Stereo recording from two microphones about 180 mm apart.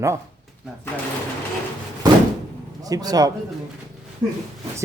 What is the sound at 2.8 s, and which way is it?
Speech, 20° right (ahead or behind).